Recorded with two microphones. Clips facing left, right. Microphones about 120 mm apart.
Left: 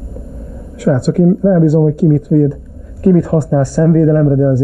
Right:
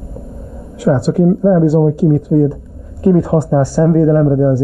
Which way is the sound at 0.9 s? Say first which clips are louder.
Left 1 dB; 25° right (ahead or behind).